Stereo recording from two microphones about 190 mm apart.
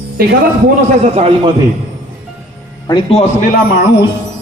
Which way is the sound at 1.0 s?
35° right (ahead or behind).